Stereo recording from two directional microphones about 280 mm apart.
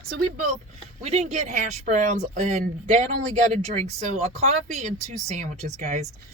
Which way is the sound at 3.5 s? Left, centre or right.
Right.